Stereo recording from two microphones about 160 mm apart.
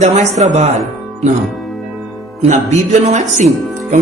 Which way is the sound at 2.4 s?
45° right (ahead or behind).